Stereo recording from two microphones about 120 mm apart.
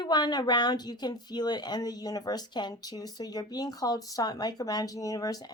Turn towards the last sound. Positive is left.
turn(degrees=30)  # may be behind; listen again after turning